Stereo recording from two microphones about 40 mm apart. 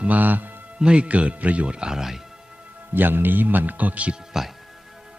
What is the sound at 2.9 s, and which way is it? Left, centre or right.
A man's voice, right.